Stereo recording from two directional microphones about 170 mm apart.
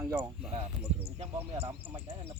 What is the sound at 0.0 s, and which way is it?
Speech, 15° right (ahead or behind).